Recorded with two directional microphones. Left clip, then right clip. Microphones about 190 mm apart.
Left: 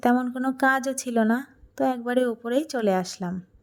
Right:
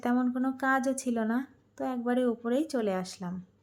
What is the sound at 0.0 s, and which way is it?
Speech, 35° left (ahead or behind).